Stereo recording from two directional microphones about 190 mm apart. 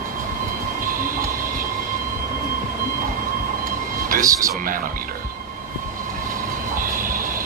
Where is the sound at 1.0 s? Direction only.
50° right (ahead or behind).